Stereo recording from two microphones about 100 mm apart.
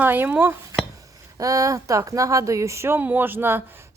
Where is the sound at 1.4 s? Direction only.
35° right (ahead or behind).